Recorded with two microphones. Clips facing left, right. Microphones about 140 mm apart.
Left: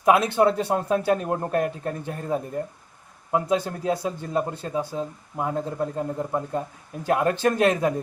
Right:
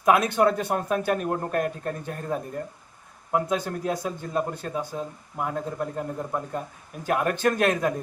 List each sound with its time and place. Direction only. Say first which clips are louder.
0.0 s speech: left 2 dB; 20° left (ahead or behind)